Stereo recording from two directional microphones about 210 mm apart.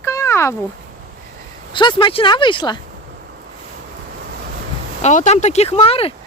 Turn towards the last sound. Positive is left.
turn(degrees=25)  # may be behind; listen again after turning